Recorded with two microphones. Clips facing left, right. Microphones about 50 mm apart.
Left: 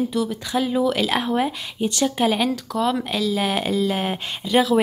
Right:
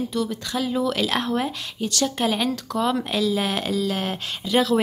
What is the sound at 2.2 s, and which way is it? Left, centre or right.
Speech, centre.